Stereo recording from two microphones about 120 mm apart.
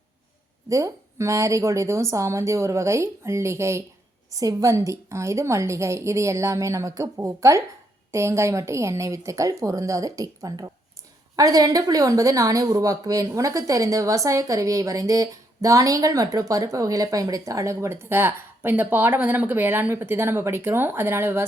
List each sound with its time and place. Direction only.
0.7 s speech: 25° right (ahead or behind)